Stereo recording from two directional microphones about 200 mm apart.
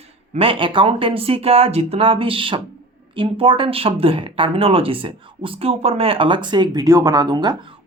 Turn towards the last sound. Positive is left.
turn(degrees=-20)  # may be behind; listen again after turning